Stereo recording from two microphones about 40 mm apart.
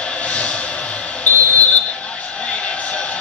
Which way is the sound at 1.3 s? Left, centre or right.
Left.